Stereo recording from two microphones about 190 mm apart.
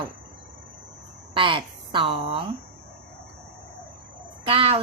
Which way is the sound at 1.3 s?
25° right (ahead or behind).